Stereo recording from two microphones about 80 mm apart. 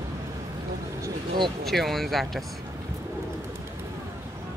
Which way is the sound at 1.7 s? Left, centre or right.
Centre.